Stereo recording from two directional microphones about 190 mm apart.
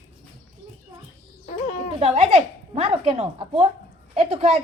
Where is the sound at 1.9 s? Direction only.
30° right (ahead or behind).